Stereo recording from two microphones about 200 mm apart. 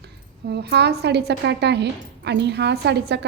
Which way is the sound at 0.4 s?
55° right (ahead or behind).